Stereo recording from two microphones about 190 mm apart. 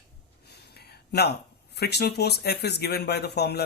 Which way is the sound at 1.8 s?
60° left (ahead or behind).